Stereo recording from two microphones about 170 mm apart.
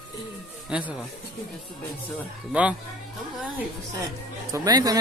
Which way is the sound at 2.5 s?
5° right (ahead or behind).